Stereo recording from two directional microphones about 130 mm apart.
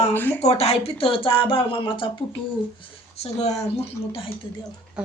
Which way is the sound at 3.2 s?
55° left (ahead or behind).